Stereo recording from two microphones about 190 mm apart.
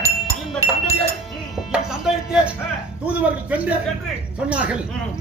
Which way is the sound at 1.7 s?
5° right (ahead or behind).